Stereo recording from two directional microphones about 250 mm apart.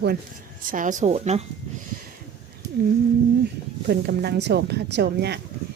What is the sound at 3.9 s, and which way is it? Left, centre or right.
Speech, right.